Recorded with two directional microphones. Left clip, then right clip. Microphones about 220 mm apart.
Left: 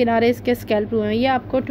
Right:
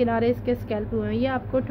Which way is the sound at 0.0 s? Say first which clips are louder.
Left 5 dB; 30° left (ahead or behind).